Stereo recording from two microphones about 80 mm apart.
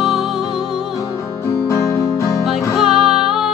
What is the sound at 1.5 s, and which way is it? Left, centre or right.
Music, left.